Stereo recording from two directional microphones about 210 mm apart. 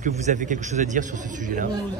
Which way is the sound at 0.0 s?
35° right (ahead or behind).